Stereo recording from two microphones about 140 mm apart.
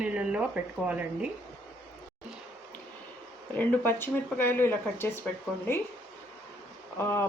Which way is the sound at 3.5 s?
10° left (ahead or behind).